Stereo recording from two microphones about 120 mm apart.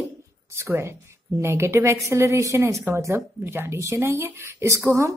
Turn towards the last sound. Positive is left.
turn(degrees=-20)  # may be behind; listen again after turning